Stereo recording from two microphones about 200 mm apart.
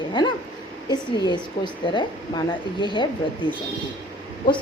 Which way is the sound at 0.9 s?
20° left (ahead or behind).